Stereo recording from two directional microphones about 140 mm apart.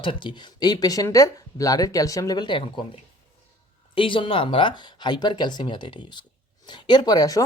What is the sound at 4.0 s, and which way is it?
Speech, 35° left (ahead or behind).